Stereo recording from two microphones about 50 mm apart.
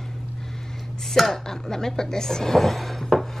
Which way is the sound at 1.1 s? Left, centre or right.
Centre.